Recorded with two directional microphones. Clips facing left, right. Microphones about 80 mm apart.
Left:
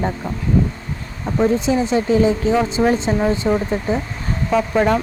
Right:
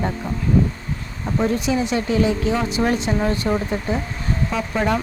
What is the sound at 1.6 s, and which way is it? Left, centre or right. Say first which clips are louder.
Speech: left 3 dB; left.